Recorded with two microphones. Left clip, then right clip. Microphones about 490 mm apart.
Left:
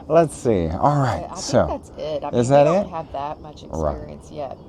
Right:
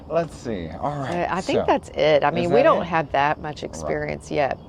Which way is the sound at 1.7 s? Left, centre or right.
Right.